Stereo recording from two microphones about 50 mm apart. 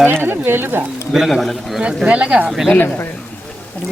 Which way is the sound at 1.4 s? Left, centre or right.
Centre.